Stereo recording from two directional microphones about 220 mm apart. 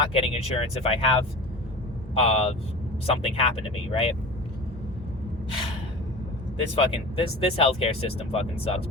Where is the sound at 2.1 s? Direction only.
25° left (ahead or behind).